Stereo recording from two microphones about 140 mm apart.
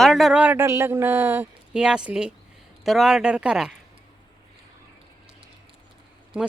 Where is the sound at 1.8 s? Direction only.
5° right (ahead or behind).